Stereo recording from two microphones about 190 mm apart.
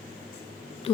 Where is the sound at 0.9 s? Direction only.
30° left (ahead or behind).